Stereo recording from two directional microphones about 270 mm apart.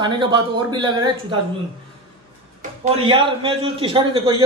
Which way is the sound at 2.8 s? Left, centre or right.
Right.